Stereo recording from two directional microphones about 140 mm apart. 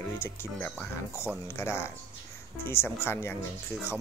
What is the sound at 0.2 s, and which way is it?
Speech, 15° left (ahead or behind).